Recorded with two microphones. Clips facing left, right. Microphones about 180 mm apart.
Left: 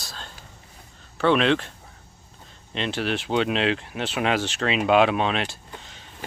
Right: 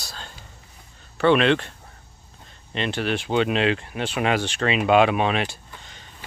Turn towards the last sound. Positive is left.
turn(degrees=0)  # may be behind; listen again after turning